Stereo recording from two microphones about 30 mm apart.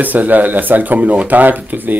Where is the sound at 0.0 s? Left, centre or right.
Right.